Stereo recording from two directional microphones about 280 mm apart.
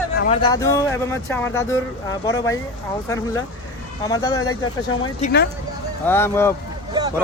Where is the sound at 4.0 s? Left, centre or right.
Centre.